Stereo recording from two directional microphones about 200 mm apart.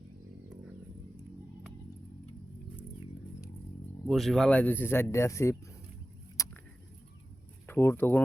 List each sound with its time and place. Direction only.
4.0 s speech: centre (ahead or behind)
6.3 s a sound: 15° left (ahead or behind)
7.7 s speech: 10° left (ahead or behind)